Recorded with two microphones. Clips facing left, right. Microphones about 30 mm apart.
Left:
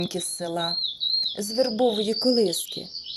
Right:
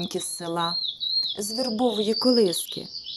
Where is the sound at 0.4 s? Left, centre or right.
Centre.